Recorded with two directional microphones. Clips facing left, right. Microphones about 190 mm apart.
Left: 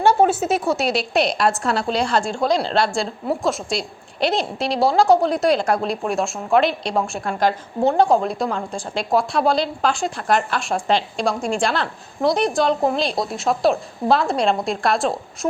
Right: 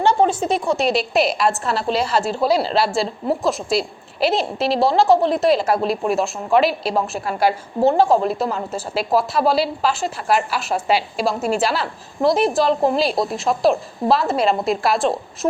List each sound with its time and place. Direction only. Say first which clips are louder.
0.0 s a woman's voice: left 1 dB; 5° left (ahead or behind)